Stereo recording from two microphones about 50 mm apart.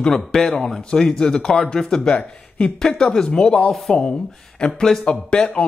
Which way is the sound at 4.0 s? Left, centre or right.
Centre.